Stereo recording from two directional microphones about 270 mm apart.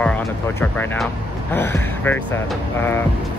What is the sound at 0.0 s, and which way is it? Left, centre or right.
Speech, centre.